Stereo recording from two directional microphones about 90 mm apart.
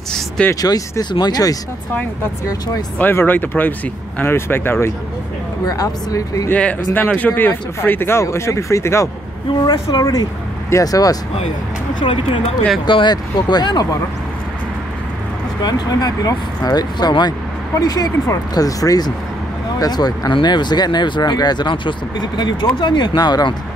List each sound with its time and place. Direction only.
0.6 s speech: 40° left (ahead or behind)
3.0 s speech: 20° left (ahead or behind)
5.7 s speech: 40° left (ahead or behind)
6.5 s speech: 20° left (ahead or behind)
9.7 s speech: 45° left (ahead or behind)
12.0 s speech: 70° left (ahead or behind)
12.8 s speech: 60° left (ahead or behind)
15.6 s speech: 45° left (ahead or behind)